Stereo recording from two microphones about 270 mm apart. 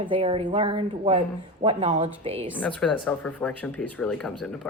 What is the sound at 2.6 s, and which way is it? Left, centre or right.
Speech, centre.